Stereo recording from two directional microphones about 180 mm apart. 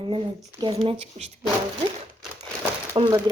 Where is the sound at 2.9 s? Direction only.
25° right (ahead or behind).